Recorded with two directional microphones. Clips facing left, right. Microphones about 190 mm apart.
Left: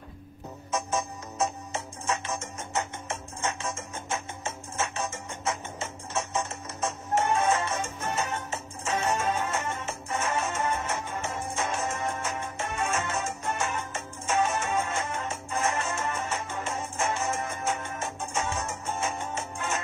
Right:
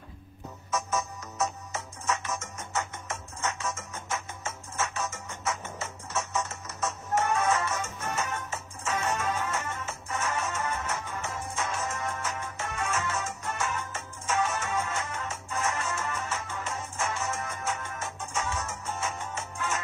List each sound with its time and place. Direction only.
0.7 s music: 30° left (ahead or behind)